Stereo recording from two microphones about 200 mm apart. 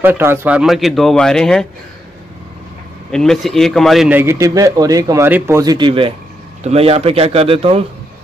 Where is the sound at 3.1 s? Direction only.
Centre (ahead or behind); by 7.8 s 30° right (ahead or behind).